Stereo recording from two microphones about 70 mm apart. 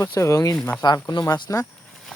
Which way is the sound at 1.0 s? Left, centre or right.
Left.